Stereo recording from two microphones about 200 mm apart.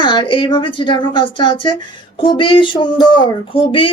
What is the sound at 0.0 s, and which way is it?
Speech, 25° left (ahead or behind).